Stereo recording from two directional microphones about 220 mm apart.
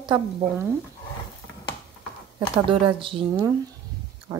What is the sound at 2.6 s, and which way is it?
Speech, 25° right (ahead or behind).